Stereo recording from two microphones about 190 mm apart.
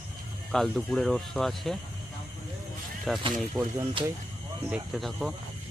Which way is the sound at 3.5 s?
15° right (ahead or behind).